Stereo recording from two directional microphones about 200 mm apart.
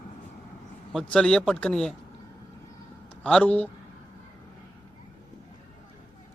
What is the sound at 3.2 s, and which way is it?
Speech, 5° left (ahead or behind).